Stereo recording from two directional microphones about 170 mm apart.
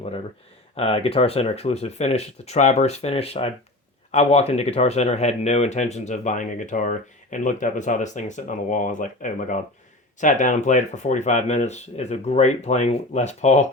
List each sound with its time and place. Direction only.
0.8 s speech: 35° left (ahead or behind)